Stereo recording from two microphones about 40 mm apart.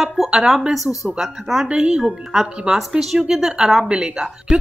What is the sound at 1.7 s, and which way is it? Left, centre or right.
Speech, right.